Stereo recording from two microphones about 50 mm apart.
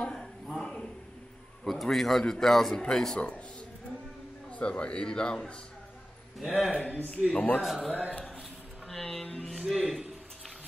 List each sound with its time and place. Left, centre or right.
0.0 s a sound: centre
1.6 s a man's voice: centre
3.2 s a man's voice: left
4.5 s a man's voice: left
6.4 s a man's voice: centre
6.9 s a man's voice: left
7.6 s a man's voice: centre
8.8 s speech: centre
9.5 s a man's voice: centre